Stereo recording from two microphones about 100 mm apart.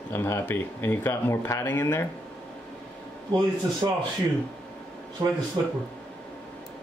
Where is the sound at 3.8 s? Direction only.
40° right (ahead or behind).